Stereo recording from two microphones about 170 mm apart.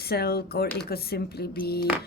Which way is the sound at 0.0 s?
65° left (ahead or behind).